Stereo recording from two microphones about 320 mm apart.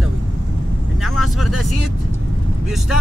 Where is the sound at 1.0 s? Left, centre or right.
Centre.